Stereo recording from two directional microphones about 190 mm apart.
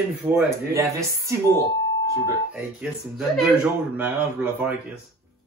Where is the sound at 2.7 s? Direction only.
5° right (ahead or behind).